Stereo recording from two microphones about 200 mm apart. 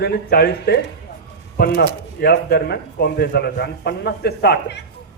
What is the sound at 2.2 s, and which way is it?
A man's voice, 55° left (ahead or behind).